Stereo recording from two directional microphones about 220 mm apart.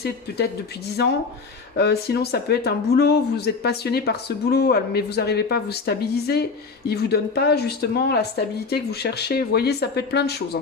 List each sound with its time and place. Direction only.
0.3 s speech: 50° left (ahead or behind)
1.7 s speech: 45° left (ahead or behind)